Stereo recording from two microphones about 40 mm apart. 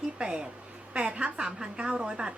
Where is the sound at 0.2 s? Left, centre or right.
Right.